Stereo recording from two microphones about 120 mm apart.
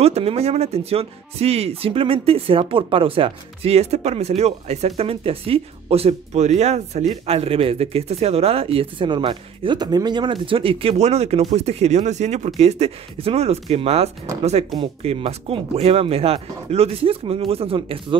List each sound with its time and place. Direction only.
0.0 s speech: 60° right (ahead or behind)
7.2 s speech: 55° right (ahead or behind); by 12.4 s 75° right (ahead or behind)
12.5 s speech: 60° right (ahead or behind)